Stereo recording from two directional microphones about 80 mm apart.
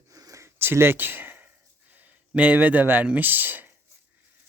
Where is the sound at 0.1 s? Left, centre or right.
Right.